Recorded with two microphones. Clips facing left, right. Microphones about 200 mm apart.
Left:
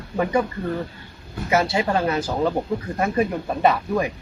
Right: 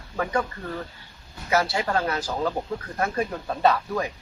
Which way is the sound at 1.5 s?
20° left (ahead or behind).